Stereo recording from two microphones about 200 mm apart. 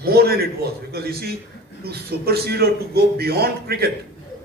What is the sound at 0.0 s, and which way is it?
A man's voice, 50° right (ahead or behind).